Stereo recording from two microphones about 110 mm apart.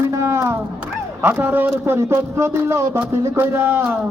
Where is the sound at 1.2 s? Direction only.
15° right (ahead or behind).